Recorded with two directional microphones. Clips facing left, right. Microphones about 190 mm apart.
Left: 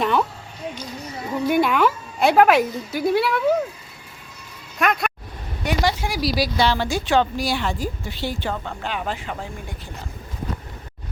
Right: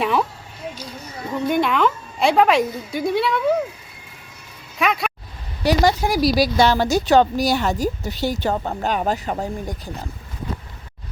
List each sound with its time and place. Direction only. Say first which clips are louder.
0.0 s a sound: even; centre (ahead or behind)
1.5 s speech: left 1 dB; 5° left (ahead or behind)
4.8 s speech: even; centre (ahead or behind)
5.6 s speech: right 5 dB; 40° right (ahead or behind)